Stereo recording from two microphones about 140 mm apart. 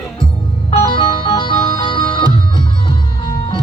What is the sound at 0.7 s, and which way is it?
Music, 40° left (ahead or behind).